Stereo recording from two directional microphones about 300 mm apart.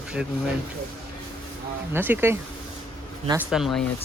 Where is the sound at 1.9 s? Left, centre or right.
Centre.